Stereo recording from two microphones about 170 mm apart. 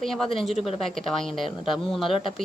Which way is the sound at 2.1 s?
30° left (ahead or behind).